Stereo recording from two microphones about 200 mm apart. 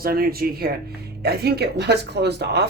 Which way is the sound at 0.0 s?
50° right (ahead or behind).